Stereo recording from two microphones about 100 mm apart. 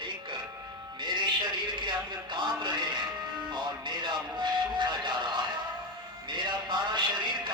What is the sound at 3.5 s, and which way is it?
Music, 50° right (ahead or behind).